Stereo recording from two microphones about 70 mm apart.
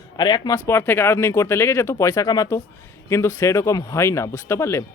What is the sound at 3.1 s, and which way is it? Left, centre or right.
Speech, left.